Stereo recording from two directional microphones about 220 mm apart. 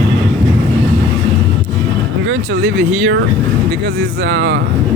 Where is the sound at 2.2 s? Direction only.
50° right (ahead or behind).